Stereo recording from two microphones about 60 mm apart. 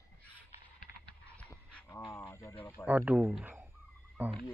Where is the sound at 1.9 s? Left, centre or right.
Left.